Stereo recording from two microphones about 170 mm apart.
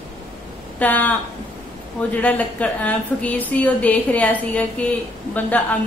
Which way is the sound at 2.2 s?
10° left (ahead or behind).